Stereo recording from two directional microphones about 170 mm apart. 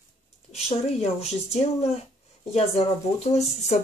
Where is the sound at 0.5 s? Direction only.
35° left (ahead or behind).